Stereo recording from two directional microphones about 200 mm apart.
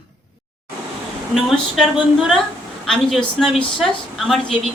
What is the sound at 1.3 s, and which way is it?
A woman's voice, centre (ahead or behind).